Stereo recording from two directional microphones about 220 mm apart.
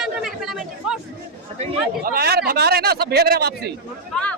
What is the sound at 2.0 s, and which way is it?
A man's voice, 45° right (ahead or behind).